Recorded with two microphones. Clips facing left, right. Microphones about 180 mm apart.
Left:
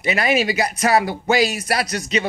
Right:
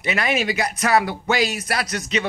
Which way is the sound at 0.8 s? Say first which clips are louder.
Left 1 dB; 35° left (ahead or behind).